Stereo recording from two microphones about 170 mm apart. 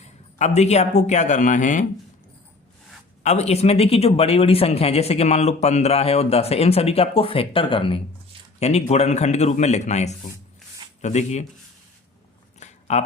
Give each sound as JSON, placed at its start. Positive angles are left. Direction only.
{"t": 0.0, "sound": "a man's voice", "side_deg": 40}
{"t": 3.2, "sound": "speech", "side_deg": 40}
{"t": 12.5, "sound": "a sound", "side_deg": 40}